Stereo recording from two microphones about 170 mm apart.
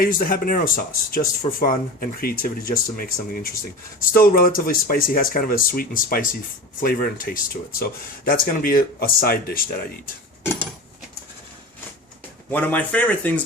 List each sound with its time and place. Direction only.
0.0 s speech: 55° left (ahead or behind)
12.5 s speech: 10° left (ahead or behind)